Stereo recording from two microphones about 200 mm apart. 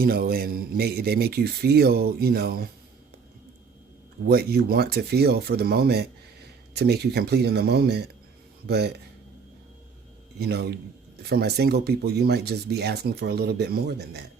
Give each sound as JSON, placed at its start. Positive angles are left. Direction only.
{"t": 0.0, "sound": "speech", "side_deg": -45}
{"t": 4.3, "sound": "speech", "side_deg": -50}
{"t": 10.3, "sound": "speech", "side_deg": -55}